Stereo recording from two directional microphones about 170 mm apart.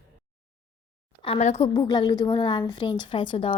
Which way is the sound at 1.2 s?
40° left (ahead or behind).